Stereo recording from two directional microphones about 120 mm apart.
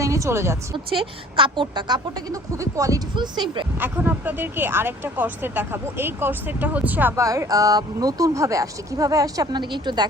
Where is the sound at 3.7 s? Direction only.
15° right (ahead or behind).